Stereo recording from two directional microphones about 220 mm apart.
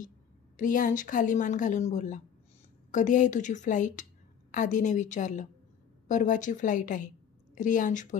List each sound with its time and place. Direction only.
0.6 s a woman's voice: 35° left (ahead or behind)